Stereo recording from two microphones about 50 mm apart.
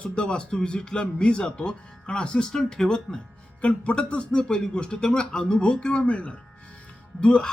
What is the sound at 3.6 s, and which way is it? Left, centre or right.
Speech, left.